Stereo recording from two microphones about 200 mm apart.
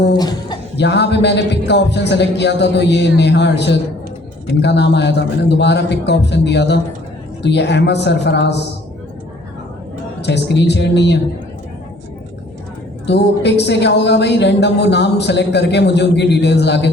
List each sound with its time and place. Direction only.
0.2 s speech: 20° left (ahead or behind)
0.8 s speech: 60° left (ahead or behind)
10.2 s speech: 60° left (ahead or behind)
13.1 s speech: 55° left (ahead or behind)